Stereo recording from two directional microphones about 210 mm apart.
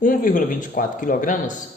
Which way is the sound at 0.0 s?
40° left (ahead or behind).